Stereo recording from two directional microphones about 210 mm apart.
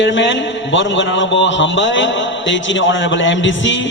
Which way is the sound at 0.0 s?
60° left (ahead or behind).